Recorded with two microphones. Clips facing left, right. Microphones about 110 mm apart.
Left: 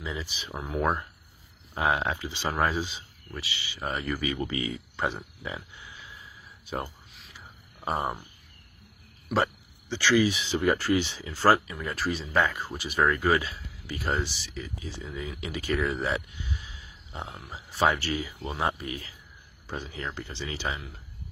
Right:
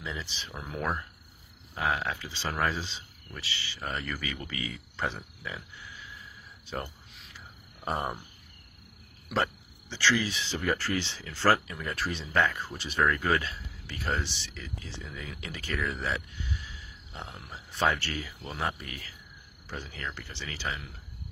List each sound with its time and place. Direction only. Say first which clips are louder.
0.0 s speech: left 3 dB; 10° left (ahead or behind)
6.7 s speech: left 3 dB; 5° left (ahead or behind)
7.3 s a sound: left 1 dB; 5° left (ahead or behind)
9.3 s speech: left 3 dB; 10° left (ahead or behind)
17.3 s speech: left 2 dB; 5° left (ahead or behind)